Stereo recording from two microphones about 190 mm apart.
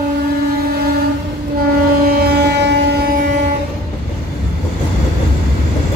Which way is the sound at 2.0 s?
55° right (ahead or behind).